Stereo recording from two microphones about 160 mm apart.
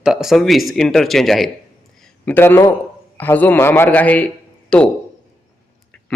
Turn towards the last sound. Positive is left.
turn(degrees=5)  # may be behind; listen again after turning